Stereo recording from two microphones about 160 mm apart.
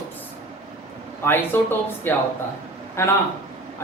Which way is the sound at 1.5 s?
15° left (ahead or behind).